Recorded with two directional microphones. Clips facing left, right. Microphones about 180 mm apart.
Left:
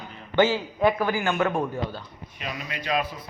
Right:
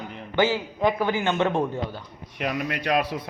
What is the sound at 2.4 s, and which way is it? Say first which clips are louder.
Speech: right 7 dB; 60° right (ahead or behind).